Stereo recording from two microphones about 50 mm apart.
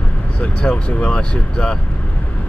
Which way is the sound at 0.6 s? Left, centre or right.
Left.